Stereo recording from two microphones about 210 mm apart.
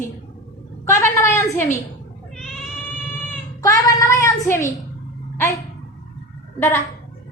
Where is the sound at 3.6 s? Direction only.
15° left (ahead or behind).